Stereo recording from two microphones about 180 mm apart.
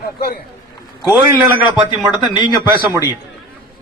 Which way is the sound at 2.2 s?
25° left (ahead or behind).